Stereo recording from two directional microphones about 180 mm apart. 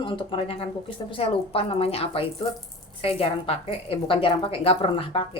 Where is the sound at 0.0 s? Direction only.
30° left (ahead or behind).